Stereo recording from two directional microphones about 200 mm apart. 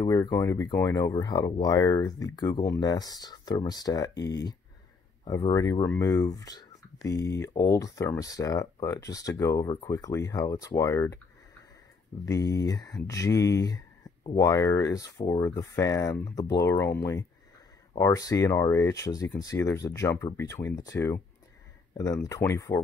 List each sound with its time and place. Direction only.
0.0 s speech: 20° left (ahead or behind)
12.3 s speech: 20° left (ahead or behind)